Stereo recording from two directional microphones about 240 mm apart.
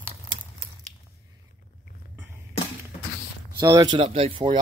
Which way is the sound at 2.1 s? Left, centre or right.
Centre.